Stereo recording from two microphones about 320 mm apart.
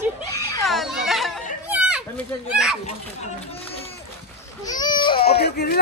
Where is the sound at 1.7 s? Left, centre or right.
Centre.